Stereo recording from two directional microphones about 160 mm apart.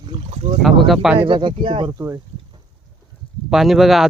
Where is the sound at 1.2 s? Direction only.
30° right (ahead or behind).